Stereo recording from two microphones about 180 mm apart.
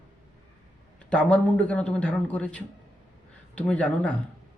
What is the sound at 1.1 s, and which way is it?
A man's voice, 5° left (ahead or behind).